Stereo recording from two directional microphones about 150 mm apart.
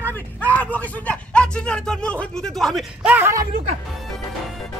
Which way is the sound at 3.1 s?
15° right (ahead or behind).